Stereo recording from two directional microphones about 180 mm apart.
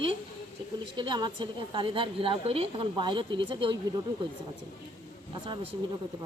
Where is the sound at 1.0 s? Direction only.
25° right (ahead or behind).